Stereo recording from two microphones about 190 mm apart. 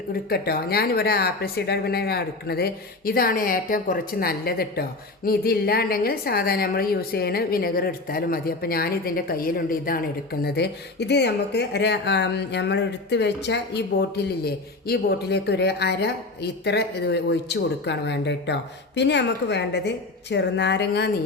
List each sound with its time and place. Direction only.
0.1 s speech: 55° left (ahead or behind)